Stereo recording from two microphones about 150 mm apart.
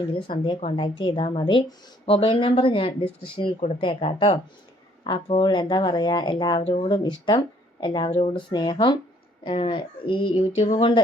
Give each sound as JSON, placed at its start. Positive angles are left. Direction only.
{"t": 0.1, "sound": "speech", "side_deg": 35}